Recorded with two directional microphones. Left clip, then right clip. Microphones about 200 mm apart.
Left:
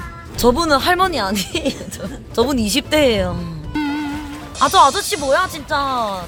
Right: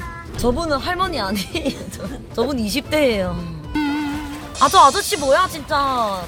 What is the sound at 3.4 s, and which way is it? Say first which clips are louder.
Speech: even; centre (ahead or behind).